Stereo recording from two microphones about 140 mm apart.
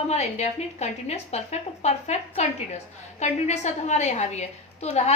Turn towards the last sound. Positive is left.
turn(degrees=50)  # may be behind; listen again after turning